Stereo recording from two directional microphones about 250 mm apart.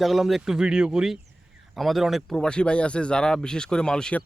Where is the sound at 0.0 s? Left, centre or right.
Centre.